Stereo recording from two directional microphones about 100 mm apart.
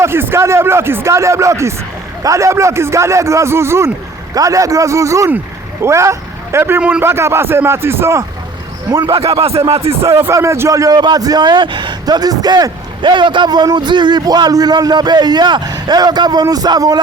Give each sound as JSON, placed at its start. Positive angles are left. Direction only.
{"t": 0.0, "sound": "a man's voice", "side_deg": -25}
{"t": 9.3, "sound": "speech", "side_deg": -75}
{"t": 10.0, "sound": "a man's voice", "side_deg": -25}